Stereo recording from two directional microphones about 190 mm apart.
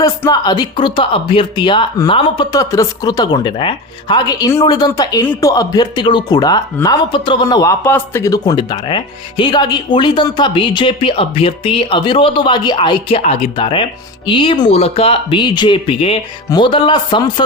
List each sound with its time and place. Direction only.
0.0 s a man's voice: 20° left (ahead or behind)